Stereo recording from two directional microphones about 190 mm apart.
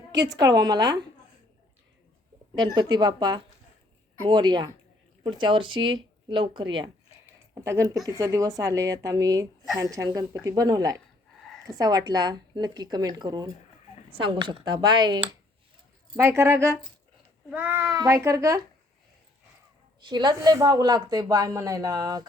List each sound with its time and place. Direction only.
0.3 s a woman's voice: 20° right (ahead or behind)
2.7 s a woman's voice: 20° right (ahead or behind)
20.0 s a woman's voice: 25° right (ahead or behind)